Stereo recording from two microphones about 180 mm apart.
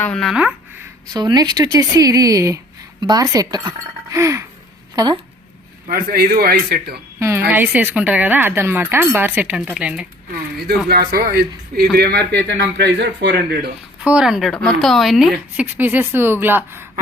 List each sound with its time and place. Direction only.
0.0 s speech: 5° left (ahead or behind)
1.1 s a woman's voice: 20° right (ahead or behind)
5.9 s a man's voice: 55° right (ahead or behind)
7.2 s a woman's voice: 15° right (ahead or behind)
10.8 s a man's voice: 60° right (ahead or behind)
14.0 s a woman's voice: 5° right (ahead or behind)